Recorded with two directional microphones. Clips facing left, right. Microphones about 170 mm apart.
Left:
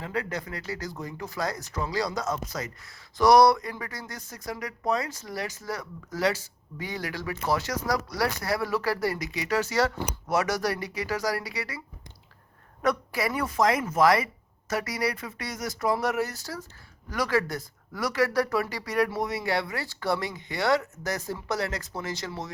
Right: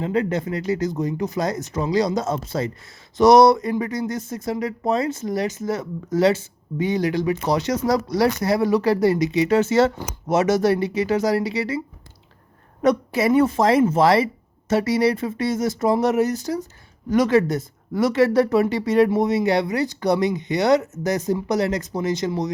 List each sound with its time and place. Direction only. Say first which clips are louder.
0.0 s speech: right 10 dB; 25° right (ahead or behind)
12.8 s speech: right 8 dB; 20° right (ahead or behind)